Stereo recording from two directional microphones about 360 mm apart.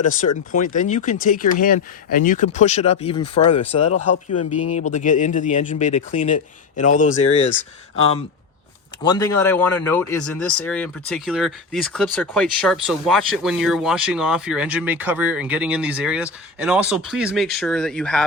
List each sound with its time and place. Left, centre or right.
0.0 s speech: left
3.8 s a man's voice: left
5.0 s speech: left
9.0 s speech: centre